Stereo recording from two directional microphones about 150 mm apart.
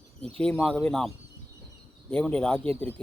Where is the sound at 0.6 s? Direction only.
5° left (ahead or behind).